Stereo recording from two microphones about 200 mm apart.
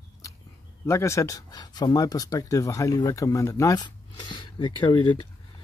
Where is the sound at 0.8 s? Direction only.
15° left (ahead or behind).